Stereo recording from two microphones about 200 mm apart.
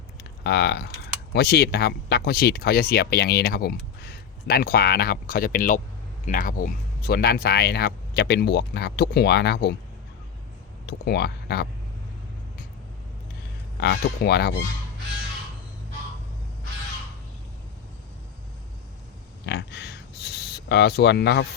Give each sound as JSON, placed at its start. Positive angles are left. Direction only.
{"t": 0.4, "sound": "speech", "side_deg": 55}
{"t": 10.8, "sound": "speech", "side_deg": 50}
{"t": 13.7, "sound": "speech", "side_deg": 55}
{"t": 19.5, "sound": "a sound", "side_deg": 55}